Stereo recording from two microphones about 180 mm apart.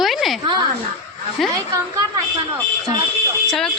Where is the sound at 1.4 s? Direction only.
Centre (ahead or behind).